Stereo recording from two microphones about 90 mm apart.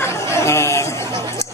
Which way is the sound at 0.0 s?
30° left (ahead or behind).